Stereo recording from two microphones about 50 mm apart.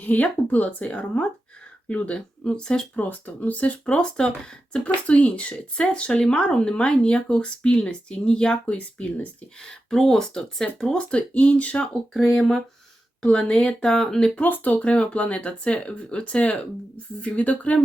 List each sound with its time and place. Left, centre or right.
0.0 s speech: left; by 3.0 s centre
3.0 s speech: left
3.8 s speech: centre
9.6 s speech: centre
11.1 s speech: left
12.3 s speech: centre
14.3 s speech: left